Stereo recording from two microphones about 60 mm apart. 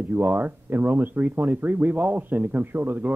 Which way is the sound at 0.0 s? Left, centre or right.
Right.